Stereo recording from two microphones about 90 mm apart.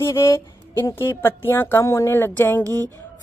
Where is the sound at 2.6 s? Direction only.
40° right (ahead or behind).